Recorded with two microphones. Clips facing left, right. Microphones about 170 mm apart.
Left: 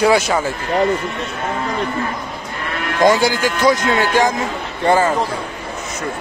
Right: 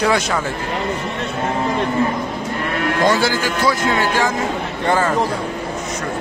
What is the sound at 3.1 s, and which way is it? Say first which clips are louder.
Speech: left 2 dB; 15° left (ahead or behind).